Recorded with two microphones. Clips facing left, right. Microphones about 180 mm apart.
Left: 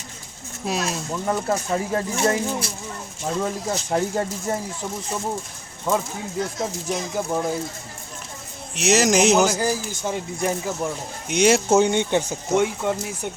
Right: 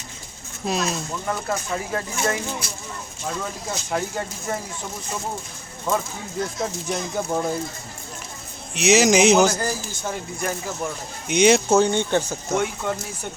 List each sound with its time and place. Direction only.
0.6 s speech: 5° left (ahead or behind)
1.3 s speech: 30° left (ahead or behind)
6.8 s speech: 5° left (ahead or behind)
8.7 s speech: centre (ahead or behind)
11.3 s speech: 5° left (ahead or behind)
11.7 s speech: 20° left (ahead or behind)